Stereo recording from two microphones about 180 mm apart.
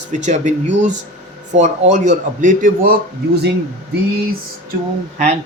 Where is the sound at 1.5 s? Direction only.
40° right (ahead or behind).